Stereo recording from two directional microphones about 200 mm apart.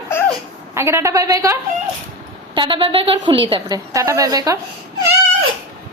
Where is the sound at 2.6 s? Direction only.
25° right (ahead or behind).